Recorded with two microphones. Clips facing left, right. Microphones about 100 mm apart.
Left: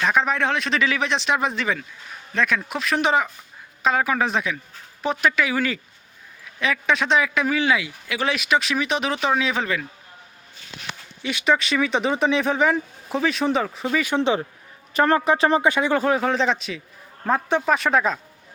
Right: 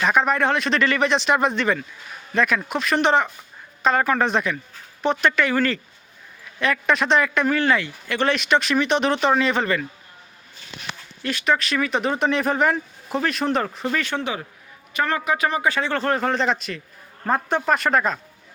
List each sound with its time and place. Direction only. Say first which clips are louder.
0.0 s a man's voice: right 2 dB; centre (ahead or behind)
11.2 s a man's voice: left 1 dB; centre (ahead or behind)
14.2 s speech: left 7 dB; 25° left (ahead or behind)
15.7 s a man's voice: left 2 dB; 15° left (ahead or behind)